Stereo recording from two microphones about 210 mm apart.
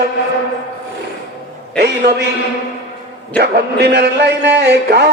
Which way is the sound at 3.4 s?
50° right (ahead or behind).